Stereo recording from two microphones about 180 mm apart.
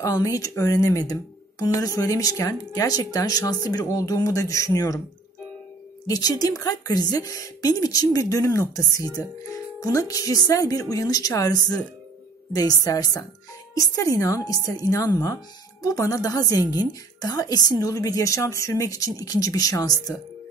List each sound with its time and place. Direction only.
0.0 s a woman's voice: 20° left (ahead or behind)
6.0 s a woman's voice: 20° left (ahead or behind)